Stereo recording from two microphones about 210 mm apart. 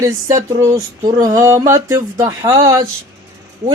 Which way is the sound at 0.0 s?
15° right (ahead or behind).